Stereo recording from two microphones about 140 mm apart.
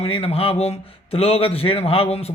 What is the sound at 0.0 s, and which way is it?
Speech, 45° left (ahead or behind).